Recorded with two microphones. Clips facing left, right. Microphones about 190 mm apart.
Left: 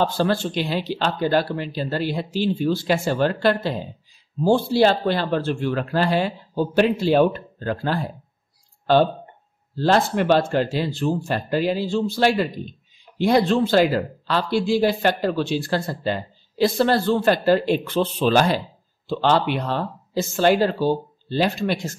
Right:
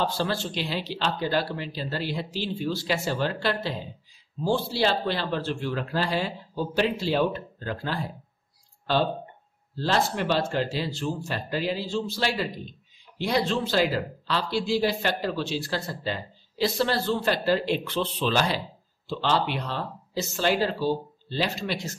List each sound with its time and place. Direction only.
0.0 s speech: 50° left (ahead or behind)
9.8 s speech: 55° left (ahead or behind)